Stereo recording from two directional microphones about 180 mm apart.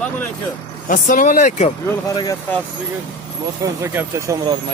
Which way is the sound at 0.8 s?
50° left (ahead or behind).